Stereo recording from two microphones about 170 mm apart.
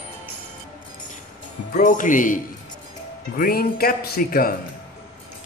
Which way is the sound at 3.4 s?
60° left (ahead or behind).